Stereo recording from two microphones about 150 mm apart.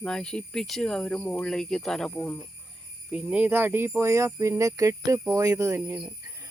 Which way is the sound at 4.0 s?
20° right (ahead or behind).